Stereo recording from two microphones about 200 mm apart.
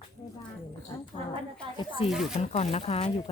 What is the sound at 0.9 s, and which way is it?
Speech, 15° left (ahead or behind).